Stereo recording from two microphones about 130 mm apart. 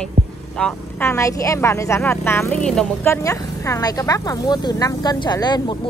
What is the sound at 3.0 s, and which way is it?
Speech, 25° left (ahead or behind).